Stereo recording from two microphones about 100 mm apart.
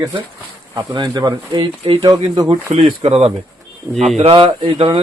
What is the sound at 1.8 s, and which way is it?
Speech, 55° right (ahead or behind).